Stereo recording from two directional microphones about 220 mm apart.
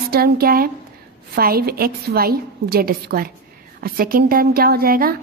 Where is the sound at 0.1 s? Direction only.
45° right (ahead or behind).